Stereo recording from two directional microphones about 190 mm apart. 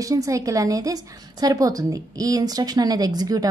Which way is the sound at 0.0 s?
20° right (ahead or behind).